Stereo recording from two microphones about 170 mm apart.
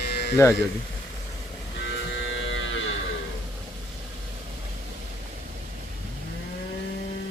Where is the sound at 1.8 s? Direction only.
90° left.